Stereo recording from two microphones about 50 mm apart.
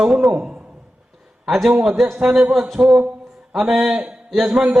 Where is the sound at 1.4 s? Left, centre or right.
Centre.